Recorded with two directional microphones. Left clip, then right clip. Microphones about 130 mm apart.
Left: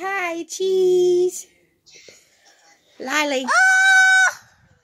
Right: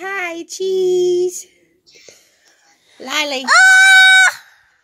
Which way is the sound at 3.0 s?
30° left (ahead or behind).